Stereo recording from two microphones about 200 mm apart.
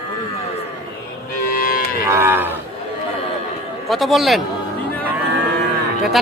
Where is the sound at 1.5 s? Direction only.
45° left (ahead or behind).